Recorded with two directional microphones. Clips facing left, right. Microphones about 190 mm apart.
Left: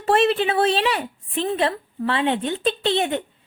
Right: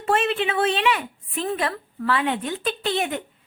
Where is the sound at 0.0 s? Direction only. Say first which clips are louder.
Left 4 dB; 35° left (ahead or behind).